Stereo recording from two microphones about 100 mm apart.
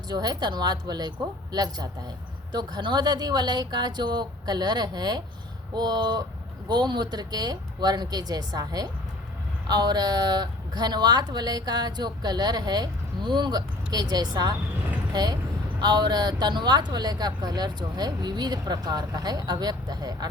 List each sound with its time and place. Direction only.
0.1 s a woman's voice: 40° right (ahead or behind)